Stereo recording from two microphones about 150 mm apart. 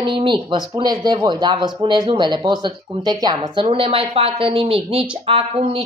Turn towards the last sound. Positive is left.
turn(degrees=-40)  # may be behind; listen again after turning